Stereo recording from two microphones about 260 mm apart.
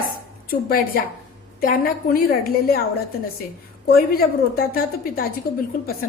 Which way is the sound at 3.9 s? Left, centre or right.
Left.